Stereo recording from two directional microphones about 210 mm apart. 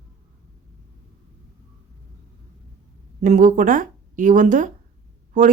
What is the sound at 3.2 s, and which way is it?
Speech, 35° right (ahead or behind).